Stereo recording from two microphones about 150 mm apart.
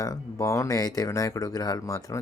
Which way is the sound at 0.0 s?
20° left (ahead or behind).